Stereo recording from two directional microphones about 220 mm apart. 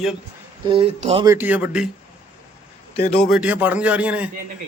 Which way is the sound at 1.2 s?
10° right (ahead or behind).